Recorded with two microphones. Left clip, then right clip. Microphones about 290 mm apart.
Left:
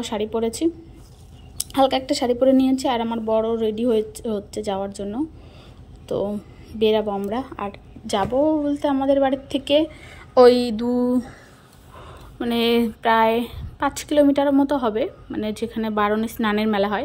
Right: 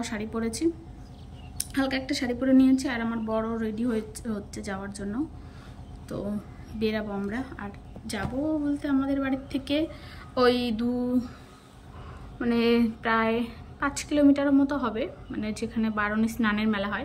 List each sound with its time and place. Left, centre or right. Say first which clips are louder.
0.4 s a woman's voice: left 2 dB; centre
6.8 s a woman's voice: left 10 dB; centre
12.4 s a woman's voice: left 4 dB; left